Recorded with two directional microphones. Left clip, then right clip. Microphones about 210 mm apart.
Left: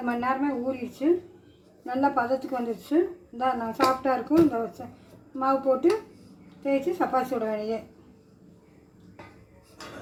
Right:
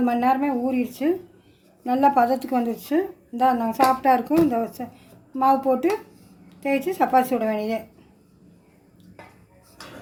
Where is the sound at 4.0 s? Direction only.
55° right (ahead or behind).